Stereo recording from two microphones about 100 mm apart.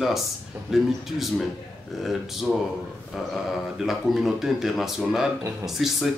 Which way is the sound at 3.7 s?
Centre (ahead or behind).